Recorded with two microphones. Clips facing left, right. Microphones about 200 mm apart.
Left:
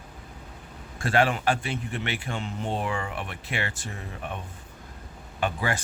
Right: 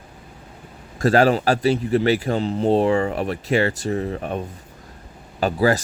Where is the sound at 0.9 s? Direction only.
40° right (ahead or behind).